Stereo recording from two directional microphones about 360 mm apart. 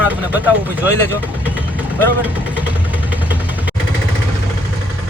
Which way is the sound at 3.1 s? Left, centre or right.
Centre.